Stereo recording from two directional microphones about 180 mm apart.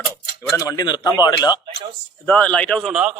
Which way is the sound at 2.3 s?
5° left (ahead or behind).